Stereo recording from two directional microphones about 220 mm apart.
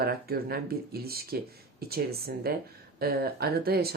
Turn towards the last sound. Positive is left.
turn(degrees=-45)  # may be behind; listen again after turning